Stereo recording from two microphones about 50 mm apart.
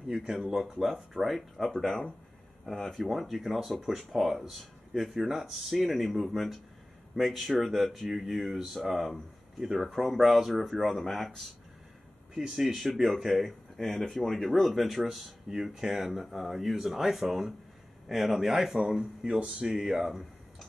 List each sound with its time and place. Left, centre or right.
0.3 s speech: centre
1.9 s speech: centre
2.6 s speech: centre
12.4 s speech: centre